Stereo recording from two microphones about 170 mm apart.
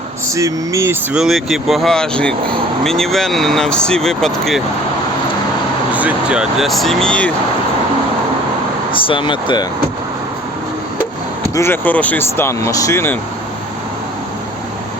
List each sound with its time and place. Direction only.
0.3 s speech: 20° right (ahead or behind)
1.1 s speech: centre (ahead or behind)
5.9 s speech: 10° right (ahead or behind)
8.9 s speech: 30° left (ahead or behind)
11.5 s speech: 15° left (ahead or behind)